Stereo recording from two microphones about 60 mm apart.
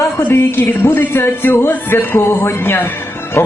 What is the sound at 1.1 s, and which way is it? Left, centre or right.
A man's voice, left.